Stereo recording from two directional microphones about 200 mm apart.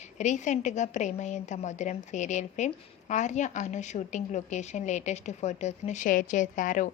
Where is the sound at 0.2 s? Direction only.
35° left (ahead or behind).